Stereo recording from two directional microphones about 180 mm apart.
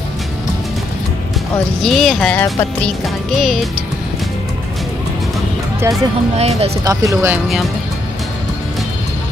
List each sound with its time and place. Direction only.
1.8 s speech: centre (ahead or behind)
6.3 s speech: 35° right (ahead or behind)
6.8 s speech: 20° right (ahead or behind)